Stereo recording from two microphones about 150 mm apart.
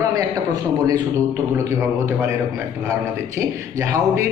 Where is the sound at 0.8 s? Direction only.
20° right (ahead or behind).